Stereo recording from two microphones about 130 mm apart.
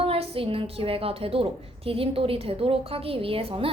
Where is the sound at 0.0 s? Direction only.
45° right (ahead or behind).